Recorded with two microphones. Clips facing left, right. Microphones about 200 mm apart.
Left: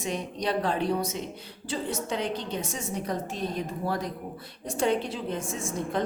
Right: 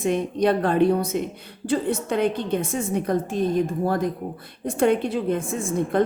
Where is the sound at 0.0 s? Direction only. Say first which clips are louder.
Right 9 dB; 55° right (ahead or behind).